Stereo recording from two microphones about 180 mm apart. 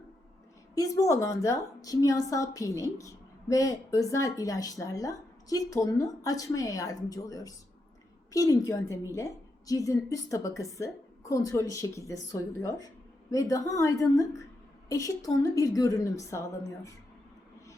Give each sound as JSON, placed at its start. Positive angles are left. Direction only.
{"t": 0.8, "sound": "a woman's voice", "side_deg": 15}